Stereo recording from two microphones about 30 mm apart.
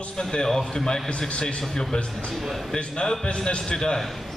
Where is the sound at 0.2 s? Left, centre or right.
Left.